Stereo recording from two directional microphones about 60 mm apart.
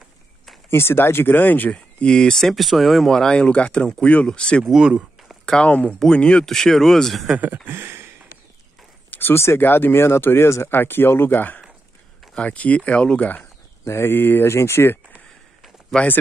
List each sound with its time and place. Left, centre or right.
0.7 s speech: left; by 7.2 s centre
7.3 s speech: right
9.1 s speech: left
13.8 s speech: left
14.5 s speech: left
15.9 s speech: centre